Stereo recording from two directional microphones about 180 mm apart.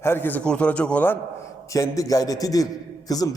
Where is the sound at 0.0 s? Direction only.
10° left (ahead or behind).